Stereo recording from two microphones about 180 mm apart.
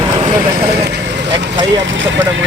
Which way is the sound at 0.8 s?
80° right.